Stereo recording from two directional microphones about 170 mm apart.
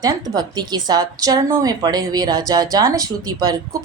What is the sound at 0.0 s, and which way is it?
Speech, 25° right (ahead or behind).